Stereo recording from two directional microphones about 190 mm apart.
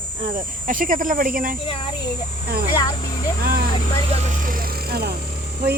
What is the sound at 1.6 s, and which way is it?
Speech, 30° left (ahead or behind).